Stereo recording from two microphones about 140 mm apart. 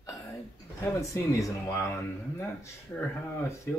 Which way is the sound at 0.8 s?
20° left (ahead or behind).